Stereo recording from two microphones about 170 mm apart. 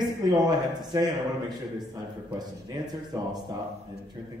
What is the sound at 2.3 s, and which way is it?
Speech, 25° right (ahead or behind).